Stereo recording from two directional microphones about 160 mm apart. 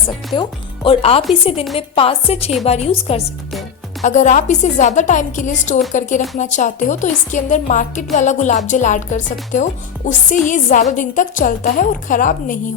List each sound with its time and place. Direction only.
0.3 s a woman's voice: 30° left (ahead or behind); by 12.5 s 55° left (ahead or behind)